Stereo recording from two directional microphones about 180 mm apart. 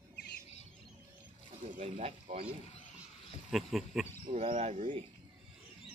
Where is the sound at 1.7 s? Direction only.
35° right (ahead or behind).